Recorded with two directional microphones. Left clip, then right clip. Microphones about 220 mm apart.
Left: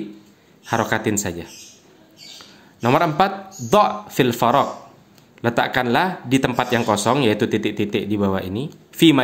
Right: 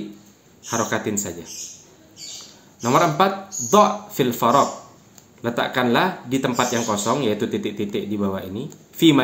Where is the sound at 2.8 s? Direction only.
45° left (ahead or behind).